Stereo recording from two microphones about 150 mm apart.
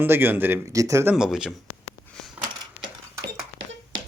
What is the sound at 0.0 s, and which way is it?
Speech, 15° right (ahead or behind).